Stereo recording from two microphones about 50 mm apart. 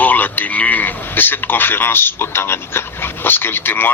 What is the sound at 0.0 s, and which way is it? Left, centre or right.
Speech, left.